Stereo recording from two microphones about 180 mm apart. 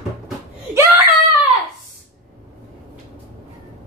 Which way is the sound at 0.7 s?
15° right (ahead or behind).